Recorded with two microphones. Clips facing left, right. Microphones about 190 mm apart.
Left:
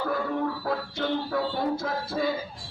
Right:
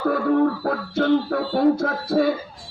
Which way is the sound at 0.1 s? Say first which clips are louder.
Right 12 dB; 60° right (ahead or behind).